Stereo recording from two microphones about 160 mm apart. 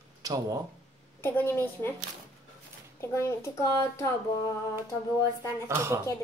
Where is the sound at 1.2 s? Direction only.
15° left (ahead or behind).